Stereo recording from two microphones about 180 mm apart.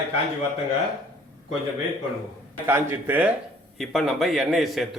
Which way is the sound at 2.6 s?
10° right (ahead or behind).